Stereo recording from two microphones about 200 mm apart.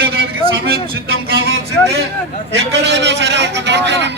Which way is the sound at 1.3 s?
55° right (ahead or behind).